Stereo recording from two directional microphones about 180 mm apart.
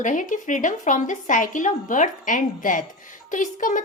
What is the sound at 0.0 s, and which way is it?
A woman's voice, 45° left (ahead or behind).